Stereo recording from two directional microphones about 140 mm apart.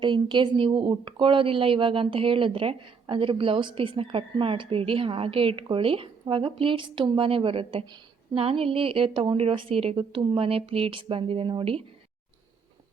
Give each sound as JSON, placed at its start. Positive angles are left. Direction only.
{"t": 0.0, "sound": "a woman's voice", "side_deg": -35}